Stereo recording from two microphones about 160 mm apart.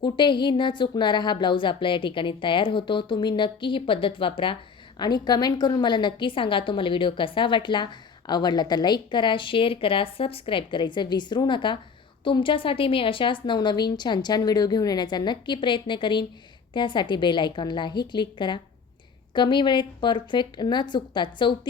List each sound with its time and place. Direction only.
0.0 s a woman's voice: 30° left (ahead or behind)